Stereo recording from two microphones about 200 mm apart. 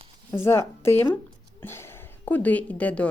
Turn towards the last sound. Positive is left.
turn(degrees=5)  # may be behind; listen again after turning